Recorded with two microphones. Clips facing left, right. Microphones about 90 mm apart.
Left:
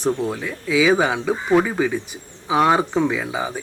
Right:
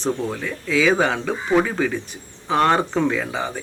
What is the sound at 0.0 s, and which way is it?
Speech, 10° left (ahead or behind).